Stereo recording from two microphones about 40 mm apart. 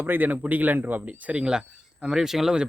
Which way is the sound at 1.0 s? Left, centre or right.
Right.